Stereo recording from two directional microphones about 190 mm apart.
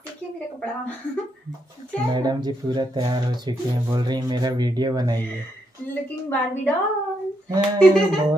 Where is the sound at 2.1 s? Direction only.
20° right (ahead or behind).